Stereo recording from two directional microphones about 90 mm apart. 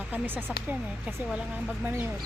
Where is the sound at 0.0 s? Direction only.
20° right (ahead or behind).